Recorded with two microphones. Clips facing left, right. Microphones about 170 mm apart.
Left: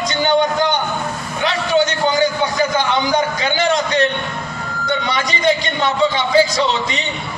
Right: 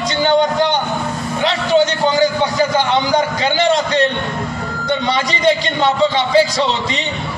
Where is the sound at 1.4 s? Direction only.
30° right (ahead or behind).